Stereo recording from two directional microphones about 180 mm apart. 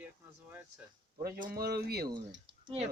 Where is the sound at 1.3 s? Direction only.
60° right (ahead or behind).